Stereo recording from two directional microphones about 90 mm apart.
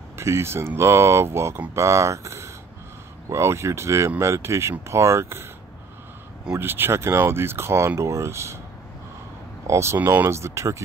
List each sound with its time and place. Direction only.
0.2 s speech: 30° right (ahead or behind)
6.5 s speech: 25° right (ahead or behind)
9.7 s speech: 30° right (ahead or behind)